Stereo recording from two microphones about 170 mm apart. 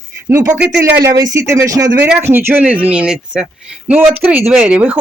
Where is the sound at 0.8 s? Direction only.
20° right (ahead or behind).